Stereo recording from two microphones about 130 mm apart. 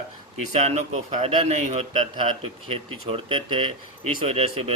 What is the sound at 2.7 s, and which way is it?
Speech, 45° right (ahead or behind).